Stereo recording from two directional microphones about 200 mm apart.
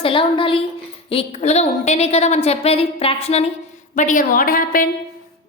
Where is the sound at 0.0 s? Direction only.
25° left (ahead or behind).